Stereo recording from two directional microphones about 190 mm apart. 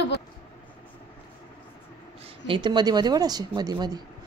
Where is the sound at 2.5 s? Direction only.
25° right (ahead or behind).